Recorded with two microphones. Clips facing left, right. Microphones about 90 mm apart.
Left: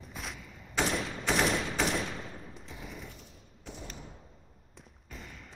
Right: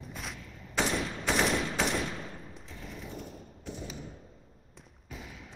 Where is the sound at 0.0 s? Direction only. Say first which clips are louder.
Right 1 dB; centre (ahead or behind).